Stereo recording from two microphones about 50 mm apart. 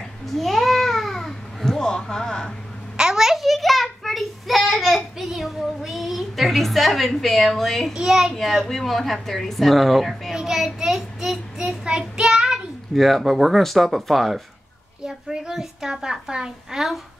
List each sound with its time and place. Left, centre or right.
0.3 s babbling: centre
1.9 s speech: centre
3.0 s a child's voice: centre
7.9 s a child's voice: centre
8.4 s speech: centre
10.3 s child singing: centre
12.9 s speech: centre
15.0 s a child's voice: centre